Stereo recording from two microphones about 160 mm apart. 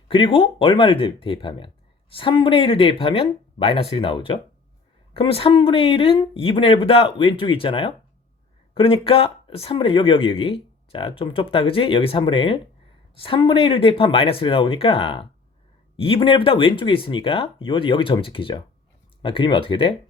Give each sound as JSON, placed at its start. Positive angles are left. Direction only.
{"t": 0.1, "sound": "speech", "side_deg": 35}